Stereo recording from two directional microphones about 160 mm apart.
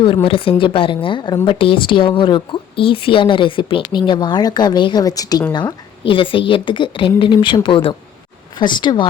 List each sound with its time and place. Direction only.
0.0 s a woman's voice: 35° left (ahead or behind)